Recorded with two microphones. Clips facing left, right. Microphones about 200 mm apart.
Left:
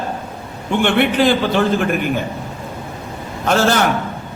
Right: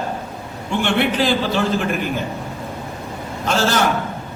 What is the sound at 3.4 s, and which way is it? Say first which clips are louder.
Speech: left 4 dB; 55° left (ahead or behind).